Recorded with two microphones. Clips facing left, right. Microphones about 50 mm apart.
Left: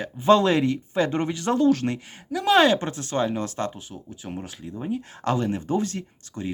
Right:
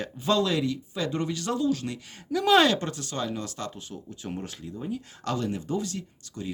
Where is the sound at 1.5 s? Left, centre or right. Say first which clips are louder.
Left 8 dB; left.